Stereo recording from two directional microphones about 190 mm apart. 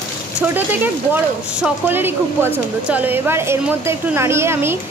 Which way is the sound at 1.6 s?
10° right (ahead or behind).